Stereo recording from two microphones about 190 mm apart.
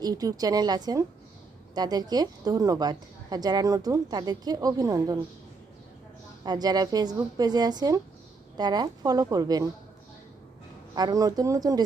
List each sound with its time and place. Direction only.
0.0 s a woman's voice: 20° right (ahead or behind)
6.4 s a woman's voice: 20° right (ahead or behind)
10.9 s a woman's voice: 20° right (ahead or behind)